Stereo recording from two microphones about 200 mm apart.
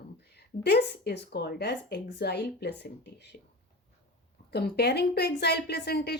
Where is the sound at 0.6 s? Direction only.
55° left (ahead or behind).